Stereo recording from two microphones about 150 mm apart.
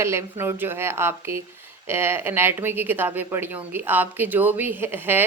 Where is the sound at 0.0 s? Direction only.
15° right (ahead or behind).